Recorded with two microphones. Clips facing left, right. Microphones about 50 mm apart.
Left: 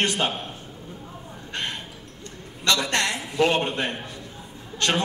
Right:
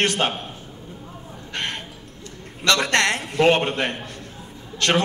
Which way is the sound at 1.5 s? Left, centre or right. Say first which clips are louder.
Right 2 dB; right.